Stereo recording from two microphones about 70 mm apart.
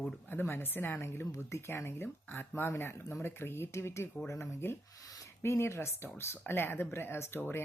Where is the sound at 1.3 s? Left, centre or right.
Left.